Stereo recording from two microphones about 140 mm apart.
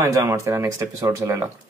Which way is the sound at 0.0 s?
20° right (ahead or behind).